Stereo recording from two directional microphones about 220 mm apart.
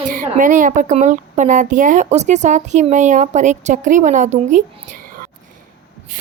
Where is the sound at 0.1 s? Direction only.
35° right (ahead or behind).